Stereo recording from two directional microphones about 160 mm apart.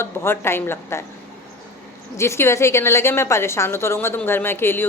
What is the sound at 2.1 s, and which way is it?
A woman's voice, 15° left (ahead or behind).